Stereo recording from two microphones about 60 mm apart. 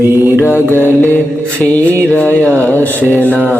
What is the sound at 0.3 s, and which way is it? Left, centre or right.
Mantra, left.